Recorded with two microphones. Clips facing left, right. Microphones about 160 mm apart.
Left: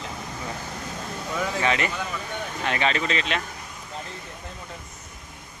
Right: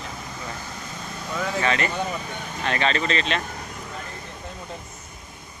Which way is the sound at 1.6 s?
15° left (ahead or behind).